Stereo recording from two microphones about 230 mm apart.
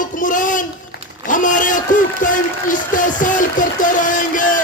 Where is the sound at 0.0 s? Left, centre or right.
Left.